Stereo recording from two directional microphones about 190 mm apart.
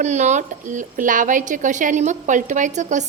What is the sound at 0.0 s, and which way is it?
A woman's voice, 40° right (ahead or behind).